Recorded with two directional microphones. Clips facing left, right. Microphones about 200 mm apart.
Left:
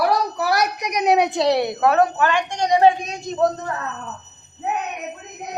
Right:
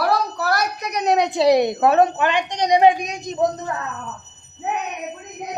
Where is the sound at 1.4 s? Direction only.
15° right (ahead or behind).